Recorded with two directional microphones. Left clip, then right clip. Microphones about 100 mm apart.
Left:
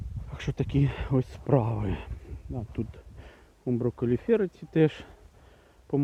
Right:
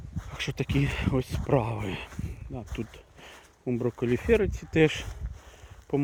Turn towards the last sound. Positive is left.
turn(degrees=15)  # may be behind; listen again after turning